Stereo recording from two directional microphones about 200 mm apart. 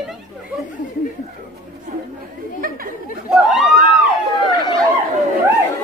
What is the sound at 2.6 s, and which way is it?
Chatter, 45° right (ahead or behind).